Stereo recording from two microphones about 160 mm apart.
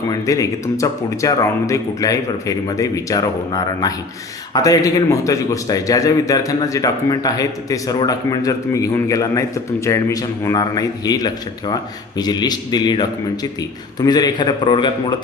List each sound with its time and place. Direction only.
0.1 s a man's voice: 20° left (ahead or behind)